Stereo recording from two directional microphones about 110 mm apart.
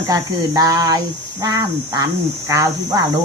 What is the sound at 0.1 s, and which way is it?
Speech, 30° right (ahead or behind).